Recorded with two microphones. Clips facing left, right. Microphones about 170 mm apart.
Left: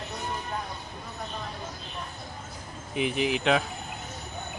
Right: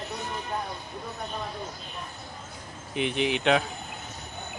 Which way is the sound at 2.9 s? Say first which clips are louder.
Even; centre (ahead or behind).